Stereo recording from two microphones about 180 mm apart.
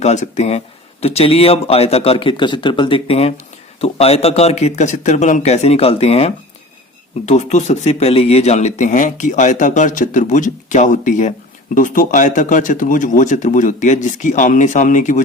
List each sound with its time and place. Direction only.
0.0 s speech: 40° left (ahead or behind)